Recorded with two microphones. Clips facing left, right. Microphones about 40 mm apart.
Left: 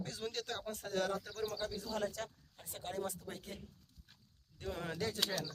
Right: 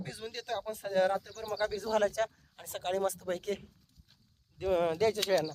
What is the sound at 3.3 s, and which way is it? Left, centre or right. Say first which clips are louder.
Speech: right 14 dB; right.